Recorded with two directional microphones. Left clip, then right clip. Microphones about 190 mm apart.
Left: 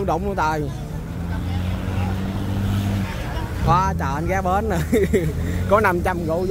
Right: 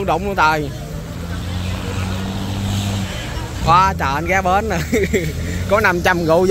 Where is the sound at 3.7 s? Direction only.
5° left (ahead or behind).